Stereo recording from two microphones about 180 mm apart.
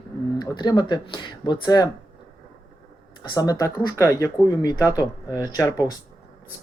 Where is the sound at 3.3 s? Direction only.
20° left (ahead or behind).